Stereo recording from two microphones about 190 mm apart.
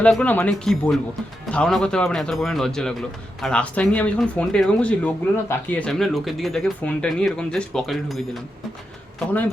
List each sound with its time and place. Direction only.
0.0 s a man's voice: 5° left (ahead or behind)